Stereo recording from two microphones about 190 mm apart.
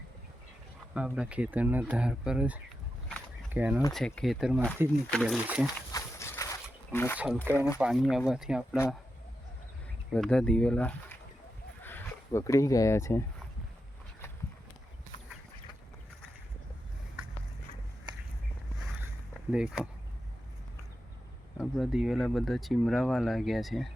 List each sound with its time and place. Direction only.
0.9 s speech: 5° right (ahead or behind)
5.9 s a sound: 15° left (ahead or behind)
7.5 s speech: 15° left (ahead or behind)
7.8 s speech: centre (ahead or behind)
10.1 s speech: 5° left (ahead or behind)
19.5 s speech: 5° right (ahead or behind)
21.6 s speech: 5° right (ahead or behind)